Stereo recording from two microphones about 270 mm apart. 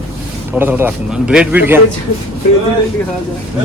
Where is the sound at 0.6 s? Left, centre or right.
Centre.